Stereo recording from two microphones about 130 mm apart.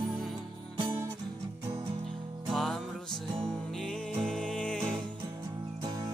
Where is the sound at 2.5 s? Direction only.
Centre (ahead or behind).